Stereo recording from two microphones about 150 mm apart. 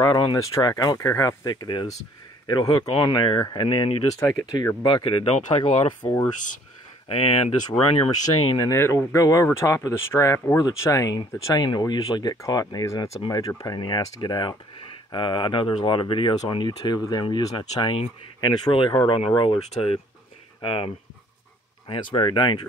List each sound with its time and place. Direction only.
0.0 s speech: 30° left (ahead or behind)
5.7 s speech: 45° left (ahead or behind)
8.5 s speech: 20° left (ahead or behind); by 20.9 s 35° left (ahead or behind)
22.1 s speech: 35° left (ahead or behind)